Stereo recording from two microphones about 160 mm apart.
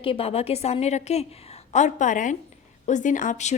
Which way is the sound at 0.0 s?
35° left (ahead or behind).